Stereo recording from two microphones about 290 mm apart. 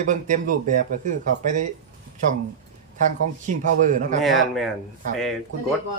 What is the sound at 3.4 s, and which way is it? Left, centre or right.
Speech, right.